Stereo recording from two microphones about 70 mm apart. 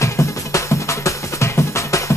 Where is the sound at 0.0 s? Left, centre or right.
Left.